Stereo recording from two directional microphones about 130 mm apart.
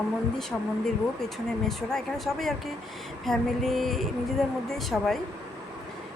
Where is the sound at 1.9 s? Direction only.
5° left (ahead or behind).